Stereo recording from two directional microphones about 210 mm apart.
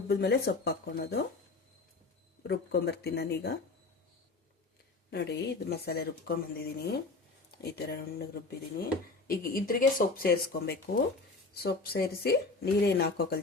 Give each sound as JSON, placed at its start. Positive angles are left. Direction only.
{"t": 0.1, "sound": "speech", "side_deg": 50}
{"t": 2.5, "sound": "speech", "side_deg": 50}
{"t": 5.1, "sound": "speech", "side_deg": 50}